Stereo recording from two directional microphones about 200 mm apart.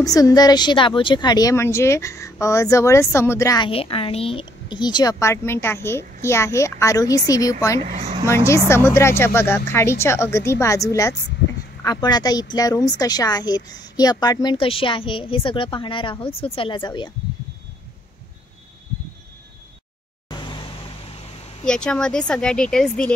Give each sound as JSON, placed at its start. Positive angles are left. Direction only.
{"t": 0.0, "sound": "a woman's voice", "side_deg": 15}
{"t": 20.2, "sound": "vehicle", "side_deg": 20}
{"t": 21.6, "sound": "speech", "side_deg": 5}